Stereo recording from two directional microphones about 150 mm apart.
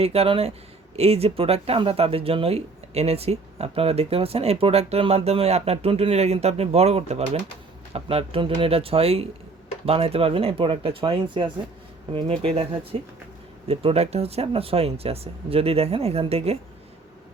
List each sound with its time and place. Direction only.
0.0 s speech: 40° right (ahead or behind)